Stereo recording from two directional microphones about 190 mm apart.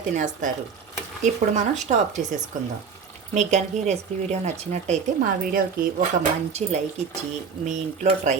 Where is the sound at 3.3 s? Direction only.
35° right (ahead or behind).